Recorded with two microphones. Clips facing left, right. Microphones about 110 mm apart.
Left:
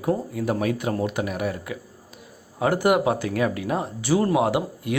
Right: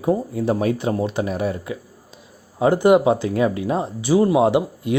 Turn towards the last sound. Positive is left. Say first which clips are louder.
# right 5 dB
turn(degrees=-20)  # may be behind; listen again after turning